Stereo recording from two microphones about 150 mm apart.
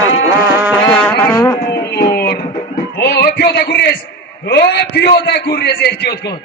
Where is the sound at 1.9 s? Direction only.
90° left.